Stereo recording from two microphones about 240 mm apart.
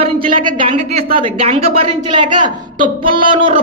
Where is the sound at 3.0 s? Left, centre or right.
Right.